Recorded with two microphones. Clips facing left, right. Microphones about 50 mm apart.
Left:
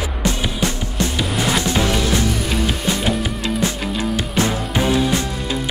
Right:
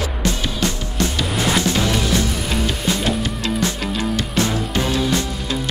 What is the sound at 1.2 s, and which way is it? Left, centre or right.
Music, centre.